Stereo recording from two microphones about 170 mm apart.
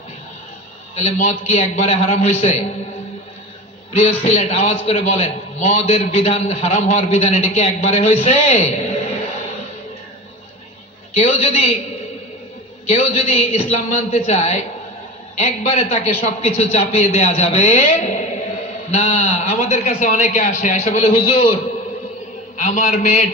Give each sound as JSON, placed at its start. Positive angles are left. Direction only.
{"t": 0.9, "sound": "a man's voice", "side_deg": 40}
{"t": 3.9, "sound": "a man's voice", "side_deg": 40}
{"t": 11.2, "sound": "a man's voice", "side_deg": 40}
{"t": 12.9, "sound": "a man's voice", "side_deg": 40}
{"t": 22.5, "sound": "a man's voice", "side_deg": 45}